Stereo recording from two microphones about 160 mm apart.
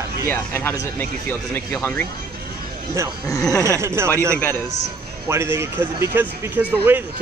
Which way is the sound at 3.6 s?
15° right (ahead or behind).